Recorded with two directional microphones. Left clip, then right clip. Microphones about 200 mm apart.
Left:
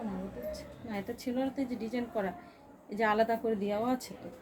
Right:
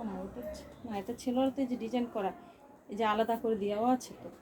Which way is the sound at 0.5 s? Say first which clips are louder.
Left 1 dB; 20° left (ahead or behind).